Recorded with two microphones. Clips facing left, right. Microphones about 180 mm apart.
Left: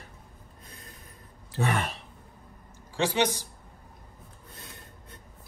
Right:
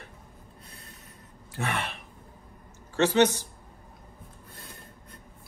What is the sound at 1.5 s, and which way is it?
Speech, 30° left (ahead or behind).